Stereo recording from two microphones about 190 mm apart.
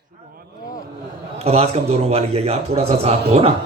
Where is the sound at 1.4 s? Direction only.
30° right (ahead or behind).